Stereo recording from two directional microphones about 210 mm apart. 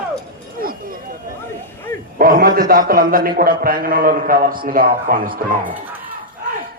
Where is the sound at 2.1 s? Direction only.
45° right (ahead or behind).